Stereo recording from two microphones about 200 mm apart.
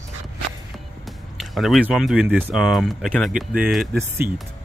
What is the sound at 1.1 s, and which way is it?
Speech, centre (ahead or behind).